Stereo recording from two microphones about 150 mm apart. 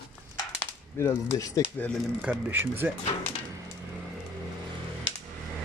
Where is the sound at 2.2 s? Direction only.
10° right (ahead or behind).